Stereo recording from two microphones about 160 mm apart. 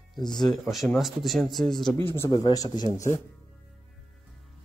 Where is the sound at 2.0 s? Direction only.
15° left (ahead or behind).